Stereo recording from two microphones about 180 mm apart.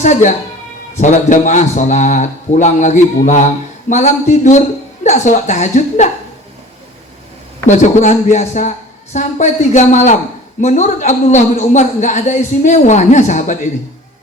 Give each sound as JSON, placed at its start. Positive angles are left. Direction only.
{"t": 0.0, "sound": "a man's voice", "side_deg": 40}
{"t": 7.7, "sound": "a man's voice", "side_deg": 40}